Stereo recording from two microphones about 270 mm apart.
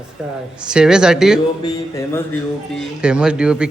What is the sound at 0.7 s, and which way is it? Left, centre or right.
Speech, centre.